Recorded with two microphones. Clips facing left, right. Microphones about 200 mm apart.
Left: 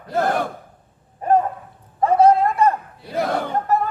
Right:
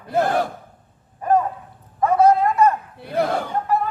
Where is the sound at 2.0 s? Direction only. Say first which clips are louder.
Left 1 dB; 30° left (ahead or behind).